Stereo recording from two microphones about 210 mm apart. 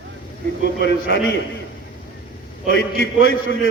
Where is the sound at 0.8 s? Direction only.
65° left (ahead or behind).